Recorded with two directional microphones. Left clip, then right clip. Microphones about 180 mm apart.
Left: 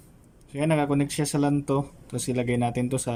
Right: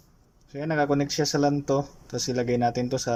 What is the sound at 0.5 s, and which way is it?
Speech, 15° left (ahead or behind).